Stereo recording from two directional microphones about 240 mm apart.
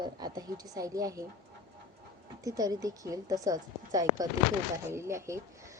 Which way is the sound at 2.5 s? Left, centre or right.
Centre.